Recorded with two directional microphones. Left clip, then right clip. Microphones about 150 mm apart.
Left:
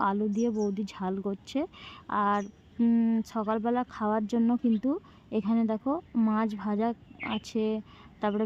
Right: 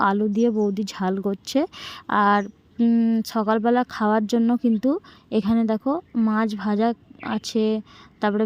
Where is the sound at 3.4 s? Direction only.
35° right (ahead or behind).